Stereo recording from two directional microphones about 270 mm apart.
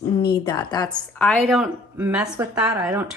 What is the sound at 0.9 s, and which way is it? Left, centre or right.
Speech, centre.